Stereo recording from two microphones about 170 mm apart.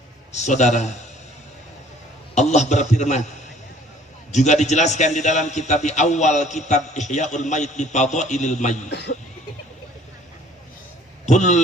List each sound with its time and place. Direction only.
0.3 s a man's voice: 45° left (ahead or behind)
2.3 s a man's voice: 40° left (ahead or behind)
4.3 s a man's voice: 45° left (ahead or behind)
8.9 s speech: 85° left
11.3 s a man's voice: 45° left (ahead or behind)